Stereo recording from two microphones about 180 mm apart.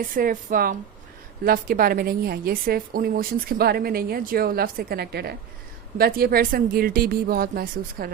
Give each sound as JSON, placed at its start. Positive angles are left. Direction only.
{"t": 0.0, "sound": "a woman's voice", "side_deg": -50}